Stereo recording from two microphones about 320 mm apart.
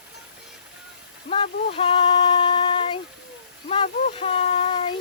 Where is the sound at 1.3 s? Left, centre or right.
Centre.